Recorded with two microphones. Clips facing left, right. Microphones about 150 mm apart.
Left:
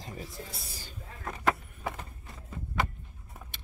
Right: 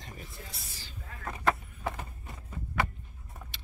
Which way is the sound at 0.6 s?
45° left (ahead or behind).